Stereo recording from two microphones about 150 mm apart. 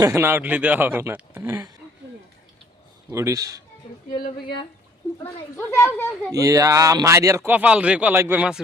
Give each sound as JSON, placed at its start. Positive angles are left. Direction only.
{"t": 0.0, "sound": "speech", "side_deg": -15}
{"t": 3.1, "sound": "speech", "side_deg": -20}
{"t": 5.2, "sound": "speech", "side_deg": 20}
{"t": 6.3, "sound": "speech", "side_deg": -20}